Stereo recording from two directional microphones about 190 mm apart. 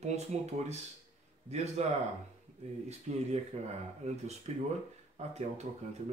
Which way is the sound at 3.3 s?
35° right (ahead or behind).